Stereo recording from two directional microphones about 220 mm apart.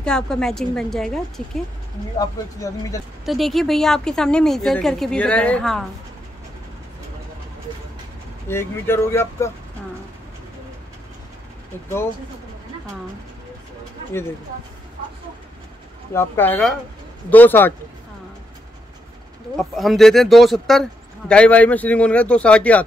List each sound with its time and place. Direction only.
0.0 s speech: 5° left (ahead or behind)
2.1 s speech: 15° left (ahead or behind)
3.3 s speech: centre (ahead or behind)
8.5 s speech: 10° left (ahead or behind)
16.1 s speech: 10° left (ahead or behind)
19.5 s speech: centre (ahead or behind)